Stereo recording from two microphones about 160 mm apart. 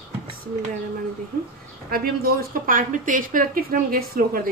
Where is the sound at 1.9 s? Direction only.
65° right (ahead or behind).